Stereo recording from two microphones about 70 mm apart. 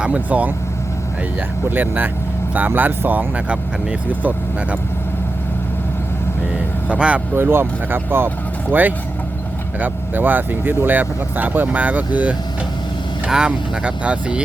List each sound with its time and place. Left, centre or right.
0.0 s speech: centre
1.7 s speech: right
6.8 s speech: centre
7.3 s speech: right
9.8 s speech: right